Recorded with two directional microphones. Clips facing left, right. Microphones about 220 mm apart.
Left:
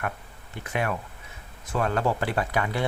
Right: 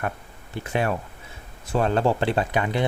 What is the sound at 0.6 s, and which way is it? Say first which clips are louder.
Speech: right 4 dB; 30° right (ahead or behind).